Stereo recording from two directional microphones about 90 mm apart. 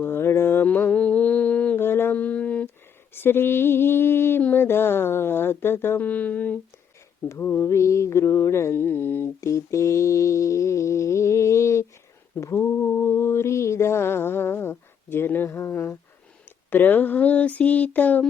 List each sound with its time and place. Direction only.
0.0 s mantra: 25° left (ahead or behind)
3.2 s mantra: 25° left (ahead or behind)
7.3 s mantra: 30° left (ahead or behind)
9.4 s mantra: 35° left (ahead or behind)
16.6 s a sound: 20° left (ahead or behind)